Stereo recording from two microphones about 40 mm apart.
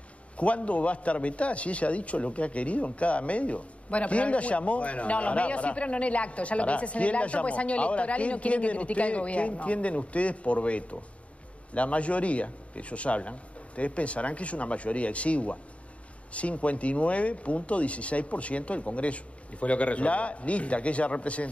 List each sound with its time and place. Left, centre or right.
0.4 s a man's voice: left